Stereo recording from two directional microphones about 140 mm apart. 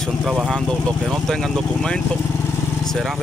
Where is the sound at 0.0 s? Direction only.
Centre (ahead or behind).